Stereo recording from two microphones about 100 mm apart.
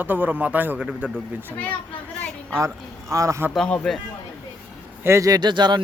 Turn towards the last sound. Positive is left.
turn(degrees=-50)  # may be behind; listen again after turning